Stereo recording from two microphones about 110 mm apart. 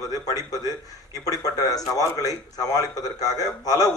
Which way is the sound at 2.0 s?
30° left (ahead or behind).